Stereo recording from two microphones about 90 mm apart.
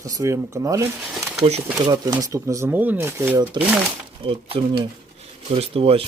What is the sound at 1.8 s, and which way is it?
Speech, 55° right (ahead or behind).